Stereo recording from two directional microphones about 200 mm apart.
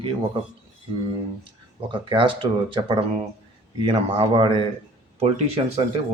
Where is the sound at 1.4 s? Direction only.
25° right (ahead or behind).